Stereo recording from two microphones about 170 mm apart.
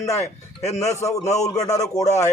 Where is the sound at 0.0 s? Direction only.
15° left (ahead or behind).